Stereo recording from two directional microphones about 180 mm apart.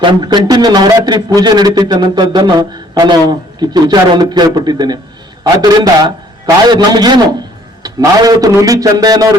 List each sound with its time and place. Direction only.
0.0 s a man's voice: 25° right (ahead or behind)